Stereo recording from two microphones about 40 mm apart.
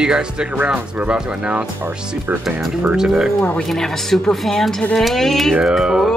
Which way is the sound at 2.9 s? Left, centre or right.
Centre.